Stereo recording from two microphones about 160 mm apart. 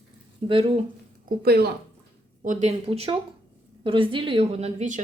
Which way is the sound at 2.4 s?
50° right (ahead or behind).